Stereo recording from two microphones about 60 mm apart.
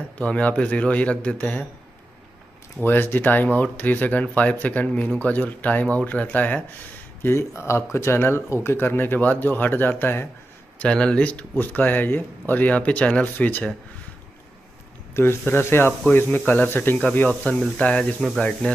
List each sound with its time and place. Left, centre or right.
0.2 s speech: left
2.8 s speech: left
7.2 s speech: left
10.8 s speech: centre
11.5 s speech: left
15.4 s speech: left; by 18.8 s centre